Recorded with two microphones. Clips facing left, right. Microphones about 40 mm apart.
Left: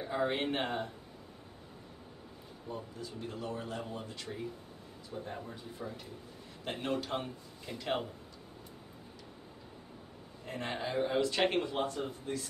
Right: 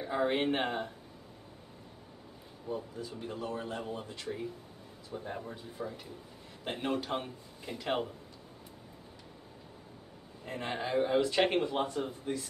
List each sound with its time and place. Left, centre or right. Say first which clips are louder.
0.0 s speech: right 3 dB; centre
2.7 s speech: right 4 dB; centre
3.3 s a man's voice: right 2 dB; right
4.2 s speech: right 3 dB; centre
10.4 s speech: right 1 dB; centre